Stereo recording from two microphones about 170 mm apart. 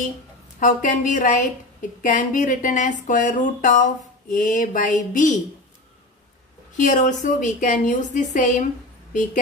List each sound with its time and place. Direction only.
0.6 s speech: 50° left (ahead or behind)
6.8 s speech: 45° left (ahead or behind)